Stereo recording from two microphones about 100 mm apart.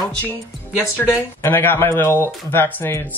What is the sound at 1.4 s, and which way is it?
A man's voice, 20° left (ahead or behind).